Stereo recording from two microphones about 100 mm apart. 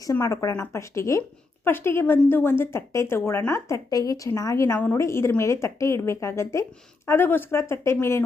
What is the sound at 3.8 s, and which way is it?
Speech, 35° left (ahead or behind).